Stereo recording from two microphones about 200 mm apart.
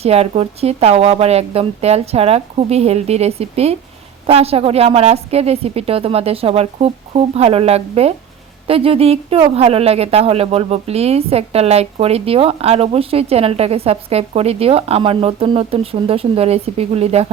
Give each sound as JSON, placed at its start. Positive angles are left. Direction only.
{"t": 0.0, "sound": "a woman's voice", "side_deg": -30}